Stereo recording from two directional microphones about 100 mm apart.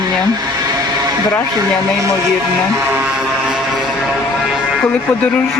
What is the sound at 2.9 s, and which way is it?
Vehicle, 10° right (ahead or behind).